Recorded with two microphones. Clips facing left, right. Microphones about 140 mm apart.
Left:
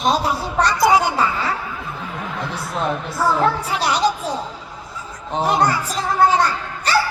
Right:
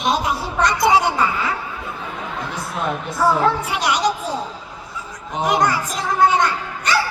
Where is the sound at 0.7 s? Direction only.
25° right (ahead or behind).